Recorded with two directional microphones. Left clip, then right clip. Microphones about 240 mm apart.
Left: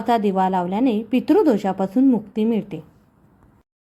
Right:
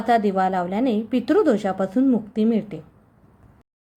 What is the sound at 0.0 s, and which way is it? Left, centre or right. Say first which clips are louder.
A woman's voice: even; centre.